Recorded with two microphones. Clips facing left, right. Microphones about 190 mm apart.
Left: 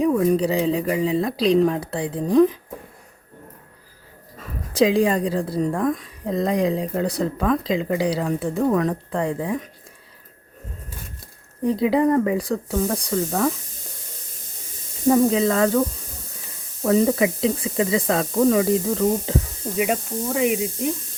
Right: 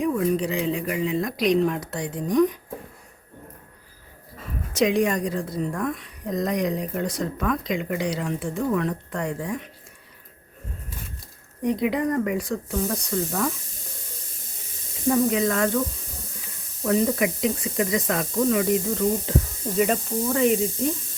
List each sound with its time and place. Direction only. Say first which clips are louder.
0.2 s a woman's voice: left 4 dB; 40° left (ahead or behind)
4.7 s a woman's voice: left 3 dB; 30° left (ahead or behind)
11.6 s a woman's voice: left 5 dB; 30° left (ahead or behind)
15.1 s speech: left 4 dB; 30° left (ahead or behind)
16.8 s a woman's voice: left 4 dB; 30° left (ahead or behind)
19.7 s speech: right 1 dB; 5° left (ahead or behind)